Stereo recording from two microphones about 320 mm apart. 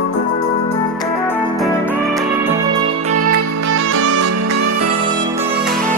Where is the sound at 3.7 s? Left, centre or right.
Right.